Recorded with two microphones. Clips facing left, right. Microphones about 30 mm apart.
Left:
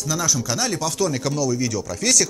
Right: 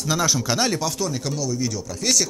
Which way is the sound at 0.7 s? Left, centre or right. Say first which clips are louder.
Left 2 dB; centre.